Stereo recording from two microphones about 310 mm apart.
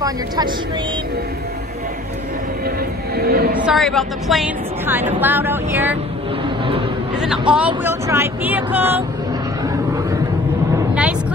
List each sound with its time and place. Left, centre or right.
3.2 s a sound: right
3.5 s a woman's voice: centre
7.2 s a woman's voice: centre
10.8 s vehicle: centre